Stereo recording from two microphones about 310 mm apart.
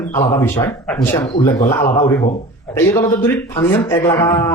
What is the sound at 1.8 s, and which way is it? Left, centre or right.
Speech, left.